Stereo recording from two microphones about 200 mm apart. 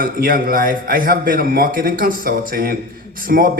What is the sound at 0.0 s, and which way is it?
A man's voice, 45° right (ahead or behind).